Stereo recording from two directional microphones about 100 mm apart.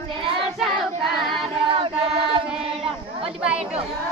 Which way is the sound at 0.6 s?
Centre (ahead or behind).